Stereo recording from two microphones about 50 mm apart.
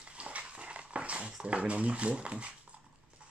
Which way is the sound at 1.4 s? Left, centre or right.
Right.